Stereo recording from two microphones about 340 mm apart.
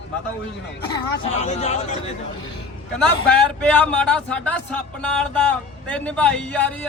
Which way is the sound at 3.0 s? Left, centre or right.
Centre.